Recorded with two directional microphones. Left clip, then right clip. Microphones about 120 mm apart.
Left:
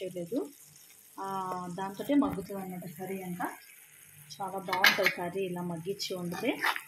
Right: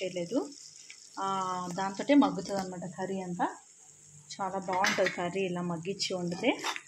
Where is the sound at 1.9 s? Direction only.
20° right (ahead or behind).